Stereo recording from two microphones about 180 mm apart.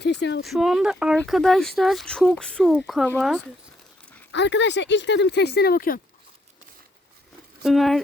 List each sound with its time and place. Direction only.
0.0 s speech: 70° left (ahead or behind)
0.4 s speech: centre (ahead or behind)
4.3 s speech: 80° left; by 6.0 s 55° left (ahead or behind)
7.6 s speech: centre (ahead or behind)